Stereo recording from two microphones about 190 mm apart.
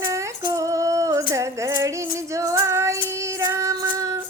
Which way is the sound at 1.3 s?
15° right (ahead or behind).